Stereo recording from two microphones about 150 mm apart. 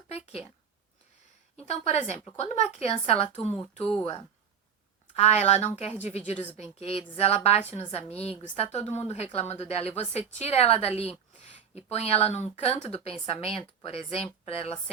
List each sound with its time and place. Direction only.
1.5 s speech: 45° left (ahead or behind)
5.1 s speech: 45° left (ahead or behind)